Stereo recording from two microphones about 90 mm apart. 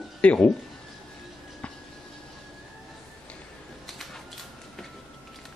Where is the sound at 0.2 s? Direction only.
15° left (ahead or behind).